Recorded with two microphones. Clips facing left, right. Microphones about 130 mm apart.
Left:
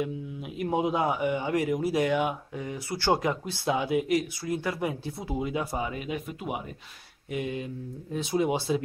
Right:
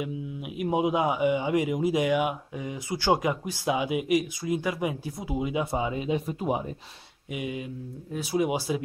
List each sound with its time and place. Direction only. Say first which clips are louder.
0.0 s speech: left 1 dB; 15° right (ahead or behind); by 6.6 s 35° right (ahead or behind)
7.2 s speech: left 1 dB; 10° right (ahead or behind)